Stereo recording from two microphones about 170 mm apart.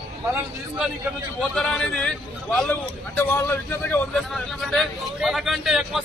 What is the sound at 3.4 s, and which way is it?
A man's voice, 10° left (ahead or behind).